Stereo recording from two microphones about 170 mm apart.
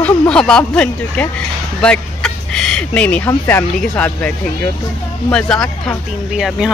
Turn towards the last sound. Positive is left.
turn(degrees=-5)  # may be behind; listen again after turning